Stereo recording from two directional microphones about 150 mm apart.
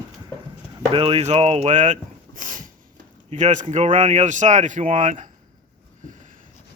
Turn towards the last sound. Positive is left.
turn(degrees=-55)  # may be behind; listen again after turning